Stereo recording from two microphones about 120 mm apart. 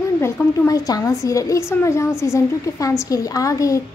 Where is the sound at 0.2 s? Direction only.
30° left (ahead or behind).